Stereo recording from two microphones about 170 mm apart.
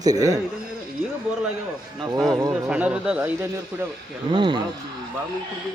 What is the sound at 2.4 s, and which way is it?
Speech, 20° right (ahead or behind).